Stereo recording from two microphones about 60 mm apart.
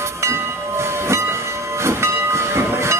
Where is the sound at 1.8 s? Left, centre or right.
Right.